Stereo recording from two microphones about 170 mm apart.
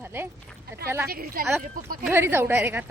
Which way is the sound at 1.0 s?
60° right (ahead or behind).